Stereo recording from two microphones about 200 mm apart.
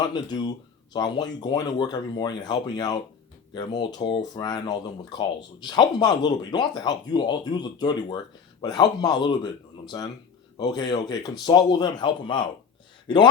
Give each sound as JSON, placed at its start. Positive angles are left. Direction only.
{"t": 0.0, "sound": "speech", "side_deg": 20}